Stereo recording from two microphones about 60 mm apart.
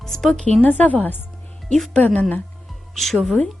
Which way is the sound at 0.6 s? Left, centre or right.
Left.